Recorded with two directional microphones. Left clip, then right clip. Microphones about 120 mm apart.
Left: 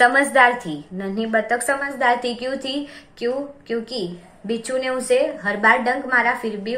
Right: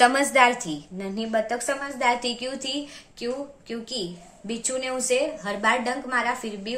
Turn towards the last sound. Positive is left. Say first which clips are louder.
# left 6 dB
turn(degrees=-25)  # may be behind; listen again after turning